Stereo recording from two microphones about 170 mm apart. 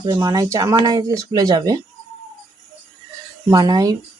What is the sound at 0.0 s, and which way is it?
Speech, 20° right (ahead or behind).